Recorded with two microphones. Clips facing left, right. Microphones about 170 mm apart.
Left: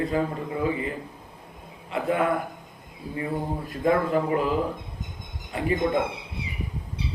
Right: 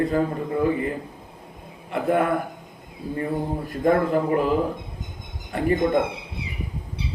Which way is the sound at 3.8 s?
45° right (ahead or behind).